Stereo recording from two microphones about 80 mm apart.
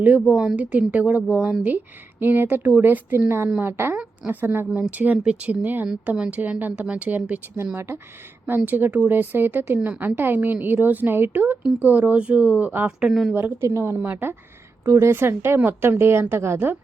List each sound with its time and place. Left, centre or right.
0.3 s speech: centre
0.5 s a woman's voice: right
8.4 s a woman's voice: right
9.7 s speech: centre
10.0 s a woman's voice: right
13.0 s speech: centre
13.3 s a woman's voice: right
13.7 s a woman's voice: right
14.0 s a woman's voice: right